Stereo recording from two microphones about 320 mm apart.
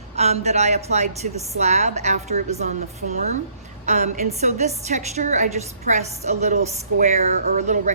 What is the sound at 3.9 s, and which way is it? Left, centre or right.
A woman's voice, right.